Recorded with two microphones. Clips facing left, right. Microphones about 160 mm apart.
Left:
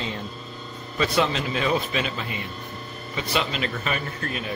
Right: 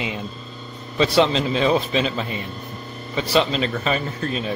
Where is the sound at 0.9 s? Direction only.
25° right (ahead or behind).